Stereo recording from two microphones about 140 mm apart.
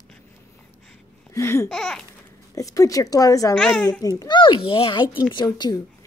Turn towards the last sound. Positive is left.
turn(degrees=30)  # may be behind; listen again after turning